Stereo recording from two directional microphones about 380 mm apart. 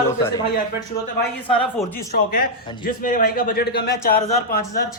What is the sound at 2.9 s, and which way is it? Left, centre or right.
A man's voice, left.